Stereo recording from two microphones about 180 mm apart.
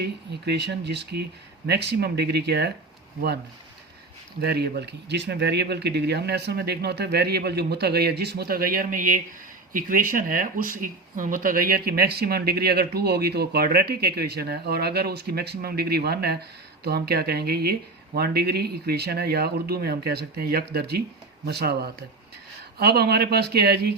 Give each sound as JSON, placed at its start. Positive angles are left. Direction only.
{"t": 0.0, "sound": "speech", "side_deg": -70}
{"t": 4.4, "sound": "speech", "side_deg": -65}